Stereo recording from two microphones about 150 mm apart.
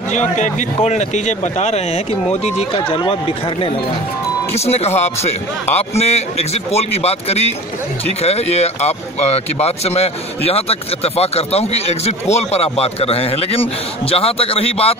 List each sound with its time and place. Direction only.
0.1 s speech: 50° left (ahead or behind)
2.7 s speech: 35° left (ahead or behind)